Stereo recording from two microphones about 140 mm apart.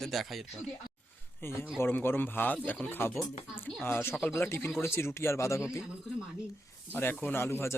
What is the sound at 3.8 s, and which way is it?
Speech, 15° left (ahead or behind).